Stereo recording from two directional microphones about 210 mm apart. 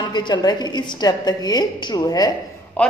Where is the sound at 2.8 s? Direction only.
5° left (ahead or behind).